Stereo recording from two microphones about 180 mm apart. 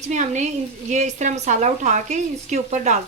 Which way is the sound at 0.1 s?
40° right (ahead or behind).